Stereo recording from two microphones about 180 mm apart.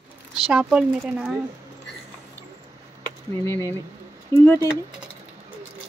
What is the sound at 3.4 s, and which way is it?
Speech, 15° left (ahead or behind).